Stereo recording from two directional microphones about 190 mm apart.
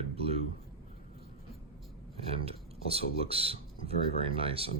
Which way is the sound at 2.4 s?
30° right (ahead or behind).